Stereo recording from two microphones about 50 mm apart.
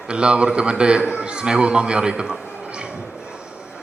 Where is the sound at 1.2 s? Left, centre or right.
Centre.